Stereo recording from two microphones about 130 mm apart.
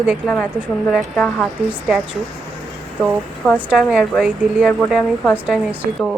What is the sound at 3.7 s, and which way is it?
Speech, 5° right (ahead or behind).